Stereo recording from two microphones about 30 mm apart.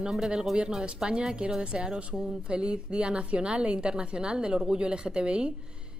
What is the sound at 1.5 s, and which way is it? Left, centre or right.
A woman's voice, right.